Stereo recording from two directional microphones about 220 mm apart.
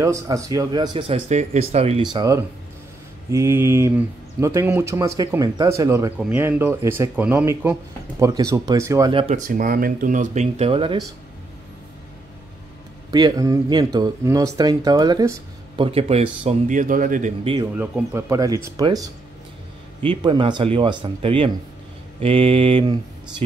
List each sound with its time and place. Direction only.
0.0 s speech: 15° right (ahead or behind)
2.1 s speech: 15° right (ahead or behind)
13.1 s speech: 15° right (ahead or behind); by 17.3 s 40° right (ahead or behind)
17.7 s speech: 10° right (ahead or behind)
20.1 s speech: 20° right (ahead or behind)